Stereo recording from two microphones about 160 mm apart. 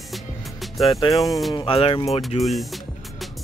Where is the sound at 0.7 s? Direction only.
Centre (ahead or behind).